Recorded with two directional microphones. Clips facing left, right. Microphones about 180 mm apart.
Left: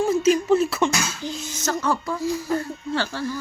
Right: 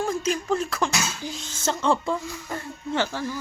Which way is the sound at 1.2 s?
10° right (ahead or behind).